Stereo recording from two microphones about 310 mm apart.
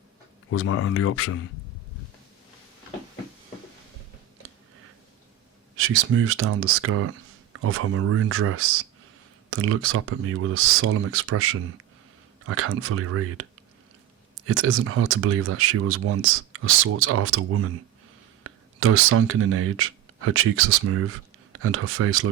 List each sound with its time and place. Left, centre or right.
0.5 s speech: left
5.7 s speech: right
14.4 s speech: right